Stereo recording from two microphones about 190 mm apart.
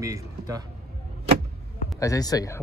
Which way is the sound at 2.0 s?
20° left (ahead or behind).